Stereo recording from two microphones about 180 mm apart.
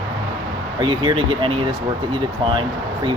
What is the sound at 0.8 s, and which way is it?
Speech, 25° right (ahead or behind).